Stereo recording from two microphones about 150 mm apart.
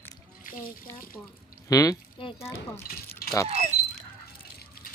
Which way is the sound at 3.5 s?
50° right (ahead or behind).